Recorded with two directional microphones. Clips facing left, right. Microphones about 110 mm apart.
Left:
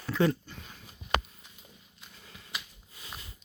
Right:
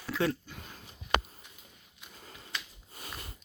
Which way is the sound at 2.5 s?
5° left (ahead or behind).